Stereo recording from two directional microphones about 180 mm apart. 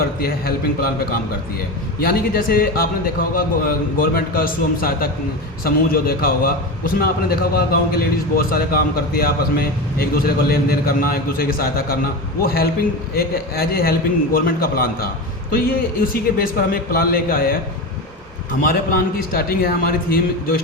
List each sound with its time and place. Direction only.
0.2 s a man's voice: 55° left (ahead or behind)
18.6 s a man's voice: 55° left (ahead or behind)